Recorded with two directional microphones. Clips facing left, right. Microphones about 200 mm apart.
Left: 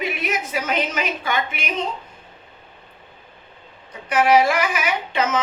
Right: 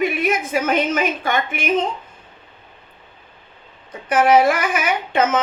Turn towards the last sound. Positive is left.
turn(degrees=-50)  # may be behind; listen again after turning